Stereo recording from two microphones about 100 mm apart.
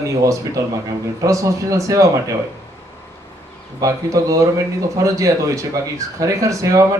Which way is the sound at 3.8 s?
35° right (ahead or behind).